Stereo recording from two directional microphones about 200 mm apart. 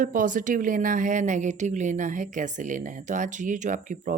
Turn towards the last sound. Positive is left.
turn(degrees=-40)  # may be behind; listen again after turning